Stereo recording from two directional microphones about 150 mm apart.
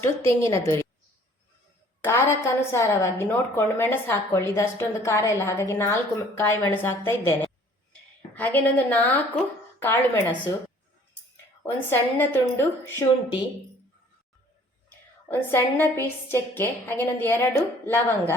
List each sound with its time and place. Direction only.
0.0 s a woman's voice: 20° left (ahead or behind)
2.0 s a woman's voice: 15° left (ahead or behind)
8.4 s a woman's voice: 10° left (ahead or behind)
11.6 s a woman's voice: 15° left (ahead or behind)
14.8 s a woman's voice: 15° left (ahead or behind)